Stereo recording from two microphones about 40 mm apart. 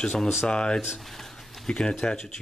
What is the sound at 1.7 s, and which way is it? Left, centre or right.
Speech, left.